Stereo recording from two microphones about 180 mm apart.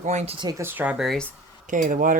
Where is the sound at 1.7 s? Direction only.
45° right (ahead or behind).